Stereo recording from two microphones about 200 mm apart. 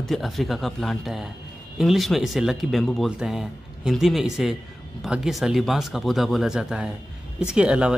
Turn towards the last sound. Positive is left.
turn(degrees=-5)  # may be behind; listen again after turning